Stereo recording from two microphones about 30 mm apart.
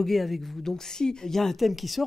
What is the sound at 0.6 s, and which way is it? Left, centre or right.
Speech, centre.